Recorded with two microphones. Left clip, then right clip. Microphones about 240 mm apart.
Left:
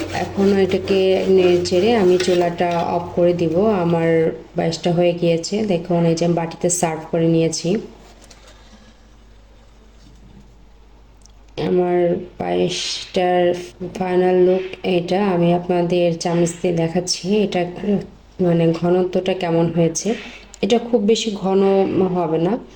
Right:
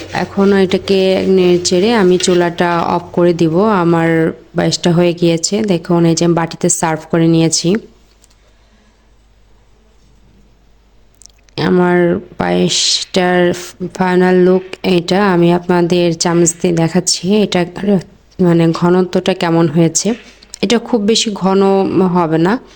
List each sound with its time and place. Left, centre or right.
0.2 s speech: right
11.2 s speech: right